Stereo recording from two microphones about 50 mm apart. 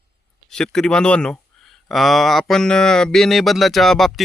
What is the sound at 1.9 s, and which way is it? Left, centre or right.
Speech, centre.